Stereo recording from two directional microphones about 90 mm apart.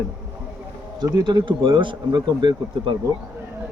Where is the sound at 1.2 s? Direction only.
60° right (ahead or behind).